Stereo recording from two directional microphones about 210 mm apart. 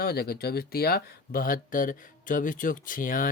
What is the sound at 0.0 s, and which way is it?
Speech, 50° left (ahead or behind).